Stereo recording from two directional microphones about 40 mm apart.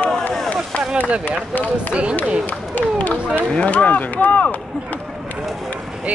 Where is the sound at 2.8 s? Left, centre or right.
Left.